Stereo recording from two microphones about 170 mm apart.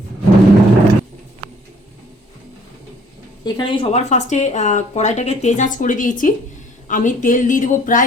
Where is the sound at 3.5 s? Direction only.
30° left (ahead or behind).